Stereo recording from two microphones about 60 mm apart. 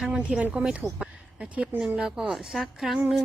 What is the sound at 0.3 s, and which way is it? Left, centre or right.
A woman's voice, right.